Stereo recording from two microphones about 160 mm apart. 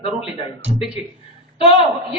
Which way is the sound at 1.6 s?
35° left (ahead or behind).